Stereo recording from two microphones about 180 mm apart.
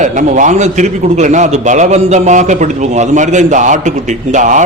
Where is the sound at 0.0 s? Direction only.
45° right (ahead or behind).